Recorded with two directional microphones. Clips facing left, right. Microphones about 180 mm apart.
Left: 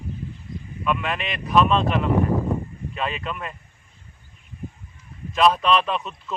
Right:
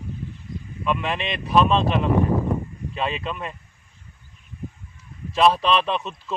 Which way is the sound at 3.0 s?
25° right (ahead or behind).